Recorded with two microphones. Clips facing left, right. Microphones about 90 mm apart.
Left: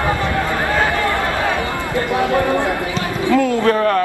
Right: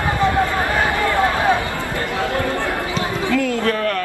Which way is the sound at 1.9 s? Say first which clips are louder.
Left 6 dB; 20° left (ahead or behind).